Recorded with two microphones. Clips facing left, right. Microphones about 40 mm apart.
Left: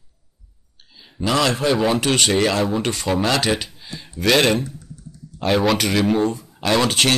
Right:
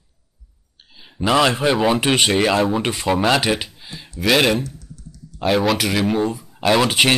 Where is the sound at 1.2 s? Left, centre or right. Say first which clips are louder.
Right 2 dB; centre.